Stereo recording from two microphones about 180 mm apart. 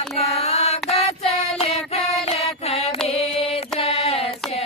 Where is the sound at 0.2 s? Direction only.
35° left (ahead or behind).